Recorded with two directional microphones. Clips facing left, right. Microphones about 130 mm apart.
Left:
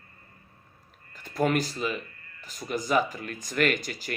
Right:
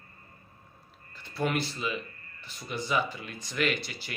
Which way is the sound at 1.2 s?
45° left (ahead or behind).